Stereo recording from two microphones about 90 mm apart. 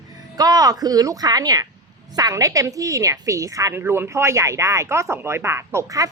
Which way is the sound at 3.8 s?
25° right (ahead or behind).